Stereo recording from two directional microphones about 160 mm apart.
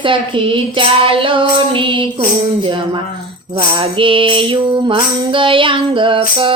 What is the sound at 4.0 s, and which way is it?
Music, 35° right (ahead or behind).